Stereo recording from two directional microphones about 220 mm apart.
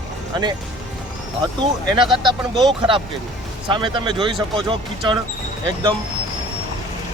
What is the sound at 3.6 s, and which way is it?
Speech, 20° right (ahead or behind).